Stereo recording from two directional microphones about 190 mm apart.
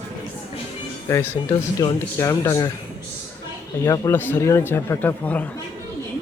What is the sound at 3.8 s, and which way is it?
A man's voice, 15° left (ahead or behind).